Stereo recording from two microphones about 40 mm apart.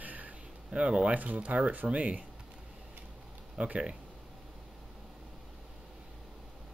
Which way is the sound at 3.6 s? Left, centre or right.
Right.